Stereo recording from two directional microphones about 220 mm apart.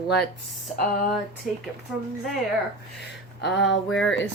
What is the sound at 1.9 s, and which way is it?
Speech, 5° right (ahead or behind).